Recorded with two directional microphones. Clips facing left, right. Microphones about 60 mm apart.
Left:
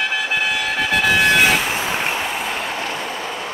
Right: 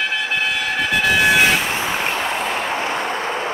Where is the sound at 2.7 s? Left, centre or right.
Right.